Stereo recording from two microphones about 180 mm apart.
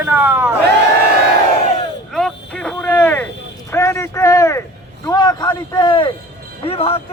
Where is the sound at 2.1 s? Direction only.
Centre (ahead or behind); by 6.1 s 25° left (ahead or behind).